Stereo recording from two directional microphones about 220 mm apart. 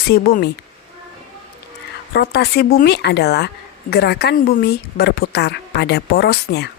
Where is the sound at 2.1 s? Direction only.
45° left (ahead or behind).